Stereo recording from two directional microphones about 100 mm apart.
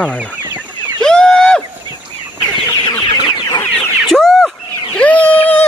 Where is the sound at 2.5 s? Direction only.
45° left (ahead or behind).